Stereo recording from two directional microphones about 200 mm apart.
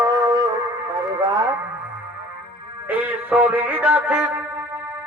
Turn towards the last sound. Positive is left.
turn(degrees=-5)  # may be behind; listen again after turning